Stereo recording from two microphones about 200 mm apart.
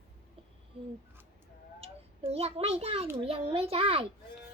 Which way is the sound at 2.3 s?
30° right (ahead or behind).